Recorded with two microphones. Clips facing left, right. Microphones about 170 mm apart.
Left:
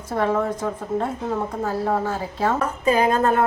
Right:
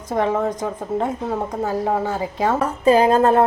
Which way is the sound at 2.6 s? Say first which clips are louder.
Right 6 dB; 35° right (ahead or behind).